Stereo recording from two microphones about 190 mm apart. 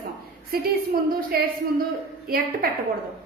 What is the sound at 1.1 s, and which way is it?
Speech, 50° right (ahead or behind).